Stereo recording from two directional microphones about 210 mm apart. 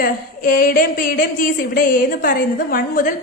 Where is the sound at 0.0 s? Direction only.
45° left (ahead or behind).